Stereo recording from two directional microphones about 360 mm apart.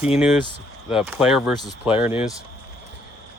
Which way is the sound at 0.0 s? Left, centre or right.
Centre.